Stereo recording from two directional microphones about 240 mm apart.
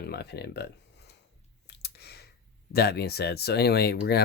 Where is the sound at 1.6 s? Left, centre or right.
Left.